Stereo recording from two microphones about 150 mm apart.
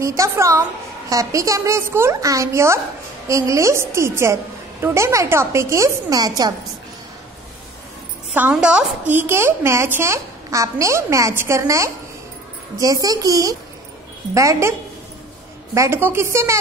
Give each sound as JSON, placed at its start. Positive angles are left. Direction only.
{"t": 0.0, "sound": "a woman's voice", "side_deg": -20}
{"t": 8.3, "sound": "a woman's voice", "side_deg": -10}